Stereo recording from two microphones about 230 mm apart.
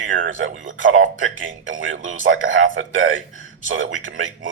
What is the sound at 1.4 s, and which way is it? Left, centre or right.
Speech, right.